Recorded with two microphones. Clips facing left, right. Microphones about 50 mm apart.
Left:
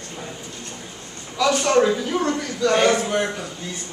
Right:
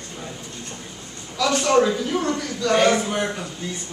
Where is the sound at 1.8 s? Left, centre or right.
Centre.